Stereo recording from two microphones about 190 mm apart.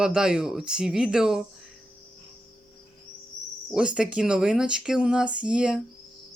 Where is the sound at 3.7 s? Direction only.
5° right (ahead or behind).